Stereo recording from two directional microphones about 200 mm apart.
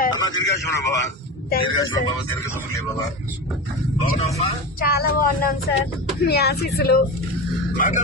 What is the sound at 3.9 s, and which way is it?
Speech, 30° left (ahead or behind).